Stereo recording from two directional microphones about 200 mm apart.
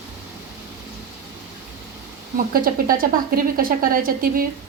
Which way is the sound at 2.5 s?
45° right (ahead or behind).